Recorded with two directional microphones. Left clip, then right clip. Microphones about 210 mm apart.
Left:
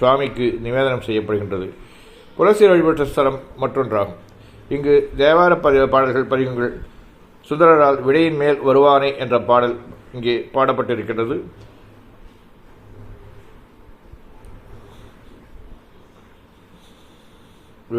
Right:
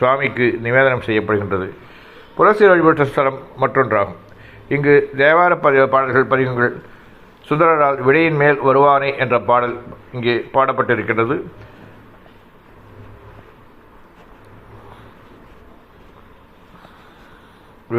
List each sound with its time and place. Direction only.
0.0 s a man's voice: 5° right (ahead or behind)